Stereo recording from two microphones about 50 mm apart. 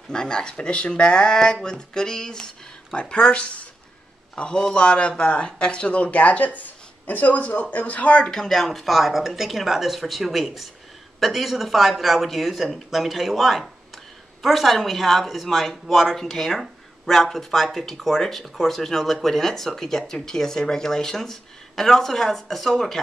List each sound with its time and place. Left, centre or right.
0.1 s speech: centre
8.3 s speech: centre